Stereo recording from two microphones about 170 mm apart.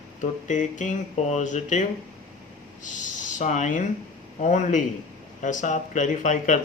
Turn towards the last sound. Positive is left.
turn(degrees=45)  # may be behind; listen again after turning